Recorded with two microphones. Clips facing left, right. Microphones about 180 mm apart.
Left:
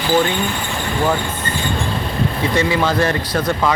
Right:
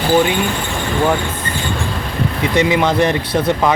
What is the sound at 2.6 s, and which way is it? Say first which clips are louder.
Speech: right 3 dB; 20° right (ahead or behind).